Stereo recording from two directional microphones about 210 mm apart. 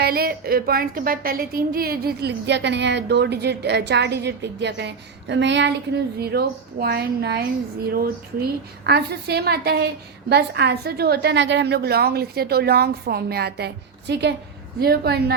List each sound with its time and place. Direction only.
0.0 s a woman's voice: 45° right (ahead or behind)